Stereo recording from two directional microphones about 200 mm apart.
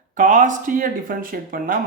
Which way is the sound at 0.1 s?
40° right (ahead or behind).